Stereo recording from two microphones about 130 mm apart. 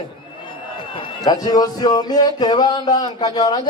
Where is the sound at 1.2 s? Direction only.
30° left (ahead or behind).